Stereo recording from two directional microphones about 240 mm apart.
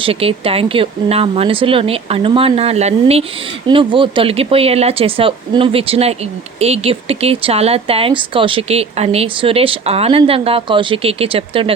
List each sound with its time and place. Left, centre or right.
0.0 s speech: right